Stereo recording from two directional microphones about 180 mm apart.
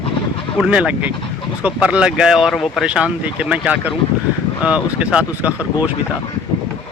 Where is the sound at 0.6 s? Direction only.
5° right (ahead or behind).